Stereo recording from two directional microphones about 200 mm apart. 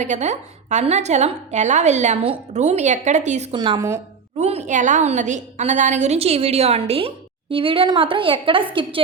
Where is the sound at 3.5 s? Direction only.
20° right (ahead or behind).